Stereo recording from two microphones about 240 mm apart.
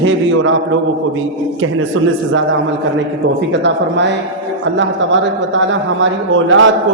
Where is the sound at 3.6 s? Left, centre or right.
Right.